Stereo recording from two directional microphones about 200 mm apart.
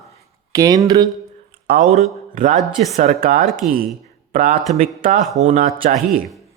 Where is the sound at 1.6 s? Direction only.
50° right (ahead or behind).